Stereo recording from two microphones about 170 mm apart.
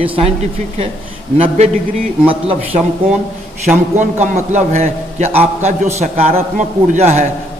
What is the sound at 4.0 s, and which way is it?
A man's voice, 45° right (ahead or behind).